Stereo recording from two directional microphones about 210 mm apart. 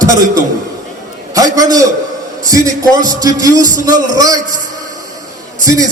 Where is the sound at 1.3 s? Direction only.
15° right (ahead or behind).